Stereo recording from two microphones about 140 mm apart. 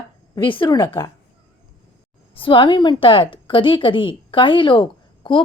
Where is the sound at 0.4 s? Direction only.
35° left (ahead or behind).